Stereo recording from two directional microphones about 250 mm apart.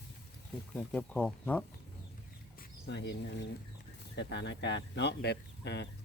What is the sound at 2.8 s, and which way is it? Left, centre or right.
Speech, left.